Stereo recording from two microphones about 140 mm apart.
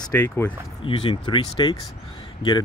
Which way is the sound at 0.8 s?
40° left (ahead or behind).